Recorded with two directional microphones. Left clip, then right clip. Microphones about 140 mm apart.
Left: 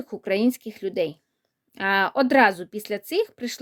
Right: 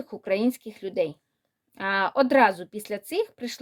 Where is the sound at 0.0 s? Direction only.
35° left (ahead or behind).